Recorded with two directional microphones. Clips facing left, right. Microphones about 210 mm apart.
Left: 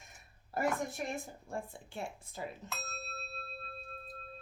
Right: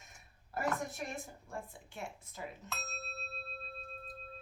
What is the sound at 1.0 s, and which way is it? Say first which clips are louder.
A woman's voice: left 3 dB; 30° left (ahead or behind).